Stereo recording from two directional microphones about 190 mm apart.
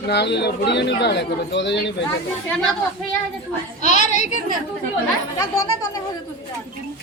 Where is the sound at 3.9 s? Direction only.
40° left (ahead or behind).